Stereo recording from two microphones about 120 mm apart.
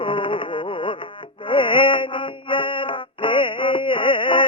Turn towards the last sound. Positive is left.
turn(degrees=45)  # may be behind; listen again after turning